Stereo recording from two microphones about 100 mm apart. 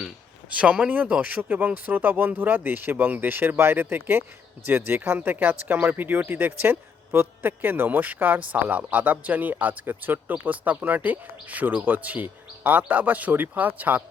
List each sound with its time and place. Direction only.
0.5 s speech: 10° right (ahead or behind)